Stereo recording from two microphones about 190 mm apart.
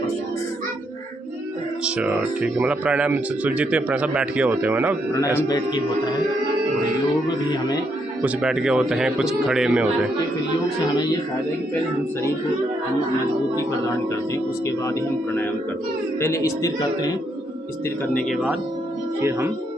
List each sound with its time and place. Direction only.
1.8 s speech: 5° right (ahead or behind)
8.2 s speech: 5° right (ahead or behind)
16.2 s speech: 15° left (ahead or behind)
18.1 s speech: 5° left (ahead or behind)